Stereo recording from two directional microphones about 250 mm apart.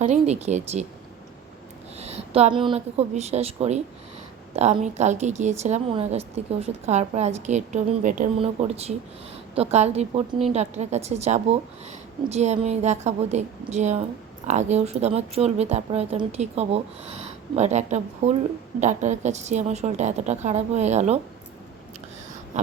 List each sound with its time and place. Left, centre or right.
0.0 s a woman's voice: right
2.0 s a woman's voice: right
22.5 s a woman's voice: right